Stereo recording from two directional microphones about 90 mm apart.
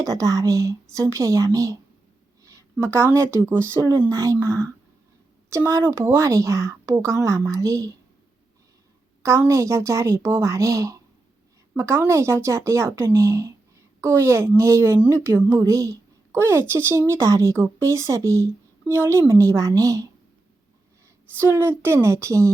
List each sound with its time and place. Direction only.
0.0 s speech: 40° right (ahead or behind)
2.4 s a sound: 35° right (ahead or behind)
2.8 s speech: 30° right (ahead or behind)
9.5 s a woman's voice: 35° right (ahead or behind)
21.3 s speech: 25° right (ahead or behind)